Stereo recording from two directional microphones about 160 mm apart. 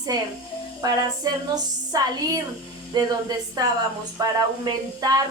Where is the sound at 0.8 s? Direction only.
25° right (ahead or behind).